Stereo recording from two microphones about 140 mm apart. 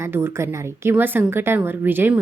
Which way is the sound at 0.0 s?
15° right (ahead or behind).